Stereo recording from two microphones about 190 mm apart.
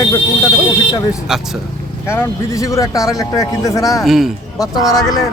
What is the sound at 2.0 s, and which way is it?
A man's voice, 15° left (ahead or behind).